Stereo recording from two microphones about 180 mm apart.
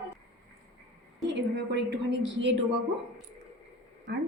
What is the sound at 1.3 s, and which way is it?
A woman's voice, 75° right (ahead or behind).